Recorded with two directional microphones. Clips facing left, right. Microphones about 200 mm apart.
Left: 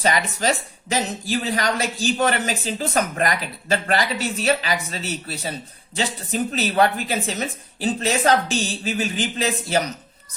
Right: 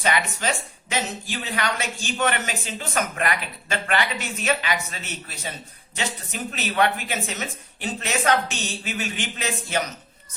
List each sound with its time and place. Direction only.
0.0 s speech: 35° left (ahead or behind)